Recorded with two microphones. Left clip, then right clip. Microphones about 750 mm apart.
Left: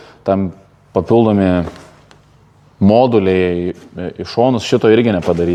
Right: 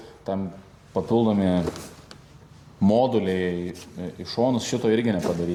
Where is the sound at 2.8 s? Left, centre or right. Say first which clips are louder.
Left 10 dB; left.